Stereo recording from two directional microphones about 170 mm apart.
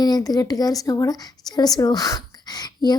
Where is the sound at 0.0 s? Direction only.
20° left (ahead or behind).